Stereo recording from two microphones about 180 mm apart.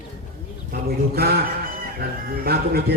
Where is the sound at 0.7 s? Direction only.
55° right (ahead or behind).